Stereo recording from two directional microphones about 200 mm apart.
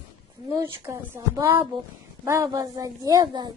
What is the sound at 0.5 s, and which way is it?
A woman's voice, 15° right (ahead or behind).